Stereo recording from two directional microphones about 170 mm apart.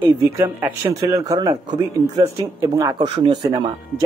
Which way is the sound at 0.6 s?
10° right (ahead or behind).